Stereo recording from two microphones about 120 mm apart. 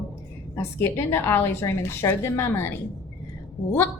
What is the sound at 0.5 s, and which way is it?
A woman's voice, 20° left (ahead or behind).